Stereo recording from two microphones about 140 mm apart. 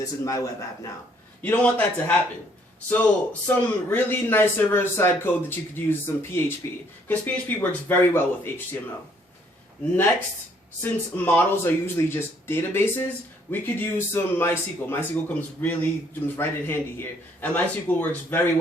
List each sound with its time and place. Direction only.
0.0 s a man's voice: 25° left (ahead or behind)
1.4 s a man's voice: 10° left (ahead or behind)
7.1 s a man's voice: 10° left (ahead or behind)
10.8 s a man's voice: 15° left (ahead or behind)